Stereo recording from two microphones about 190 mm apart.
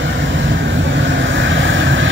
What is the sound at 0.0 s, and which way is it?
Vehicle, 80° right.